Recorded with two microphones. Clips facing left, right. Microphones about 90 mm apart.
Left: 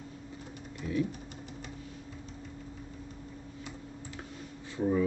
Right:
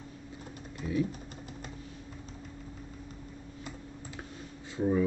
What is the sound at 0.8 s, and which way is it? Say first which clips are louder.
Typing: right 1 dB; 25° right (ahead or behind).